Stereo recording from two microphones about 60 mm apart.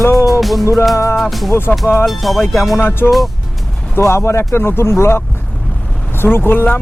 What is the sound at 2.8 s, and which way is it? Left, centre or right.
Speech, left.